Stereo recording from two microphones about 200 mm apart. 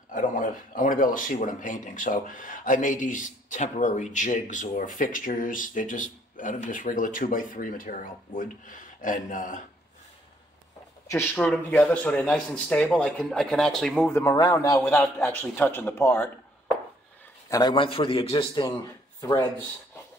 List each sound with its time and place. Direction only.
0.1 s speech: 40° left (ahead or behind)
11.1 s speech: 10° left (ahead or behind)
17.5 s a man's voice: 20° left (ahead or behind)